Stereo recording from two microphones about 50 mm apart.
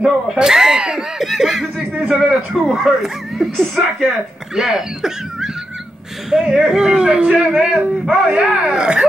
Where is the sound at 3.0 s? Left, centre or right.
Centre.